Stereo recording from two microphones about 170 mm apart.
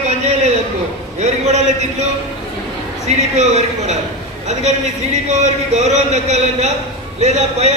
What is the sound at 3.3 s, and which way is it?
Speech, 40° right (ahead or behind).